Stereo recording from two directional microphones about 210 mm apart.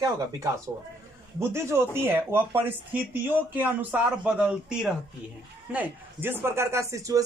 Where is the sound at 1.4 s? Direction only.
10° right (ahead or behind).